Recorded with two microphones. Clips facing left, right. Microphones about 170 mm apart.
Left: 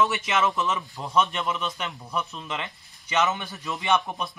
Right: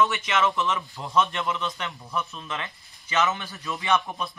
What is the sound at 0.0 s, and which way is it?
Speech, centre (ahead or behind).